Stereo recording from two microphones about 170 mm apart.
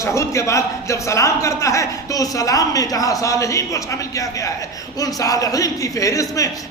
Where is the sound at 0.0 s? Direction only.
15° left (ahead or behind).